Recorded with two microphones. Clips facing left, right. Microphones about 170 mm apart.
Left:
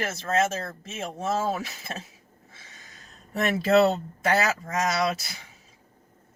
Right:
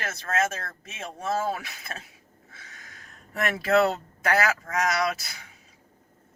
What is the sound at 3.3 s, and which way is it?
Speech, 25° left (ahead or behind).